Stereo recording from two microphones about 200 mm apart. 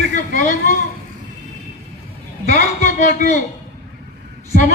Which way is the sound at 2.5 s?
40° left (ahead or behind).